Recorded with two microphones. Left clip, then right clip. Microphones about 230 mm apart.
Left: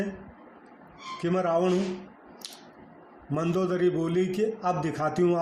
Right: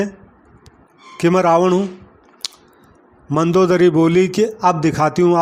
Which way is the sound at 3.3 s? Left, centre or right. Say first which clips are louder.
Right 13 dB; right.